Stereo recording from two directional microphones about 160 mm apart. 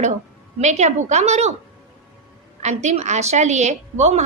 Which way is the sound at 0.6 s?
45° right (ahead or behind).